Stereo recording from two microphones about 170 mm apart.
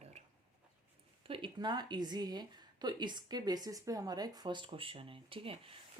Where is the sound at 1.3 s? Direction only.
30° right (ahead or behind).